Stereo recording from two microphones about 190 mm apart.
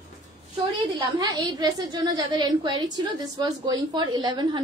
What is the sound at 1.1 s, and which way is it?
A woman's voice, 20° right (ahead or behind).